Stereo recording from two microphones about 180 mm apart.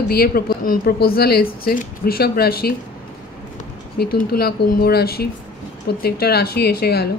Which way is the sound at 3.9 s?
60° left (ahead or behind).